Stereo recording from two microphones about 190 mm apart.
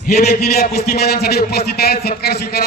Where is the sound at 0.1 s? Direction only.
55° left (ahead or behind).